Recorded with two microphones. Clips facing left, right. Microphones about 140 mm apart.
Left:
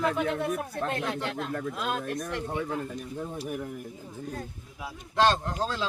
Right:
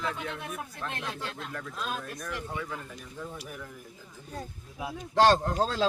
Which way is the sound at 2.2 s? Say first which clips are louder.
Left 5 dB; 55° left (ahead or behind).